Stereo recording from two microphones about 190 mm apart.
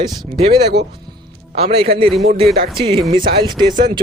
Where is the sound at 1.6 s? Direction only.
30° right (ahead or behind).